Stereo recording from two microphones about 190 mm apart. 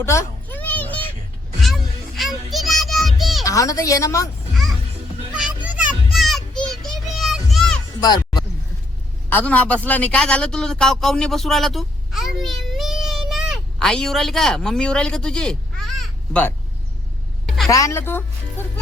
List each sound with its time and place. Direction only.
0.0 s a sound: 15° left (ahead or behind)
1.6 s music: centre (ahead or behind)
3.4 s a woman's voice: 15° left (ahead or behind)
4.5 s music: centre (ahead or behind)
5.6 s children playing: 5° right (ahead or behind)
8.0 s a sound: 20° left (ahead or behind)
9.3 s speech: 5° left (ahead or behind)
17.7 s a woman's voice: 15° left (ahead or behind)